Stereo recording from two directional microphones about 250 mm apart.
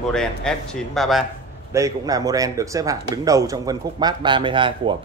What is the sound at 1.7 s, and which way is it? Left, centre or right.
Speech, centre.